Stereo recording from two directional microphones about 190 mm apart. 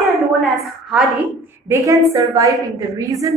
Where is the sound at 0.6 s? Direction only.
Centre (ahead or behind).